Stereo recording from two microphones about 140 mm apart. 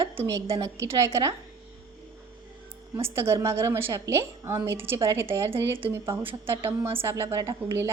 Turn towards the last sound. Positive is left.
turn(degrees=-20)  # may be behind; listen again after turning